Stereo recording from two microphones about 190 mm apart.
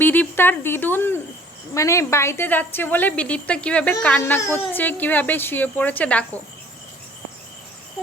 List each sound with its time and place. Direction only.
0.0 s a woman's voice: 10° left (ahead or behind)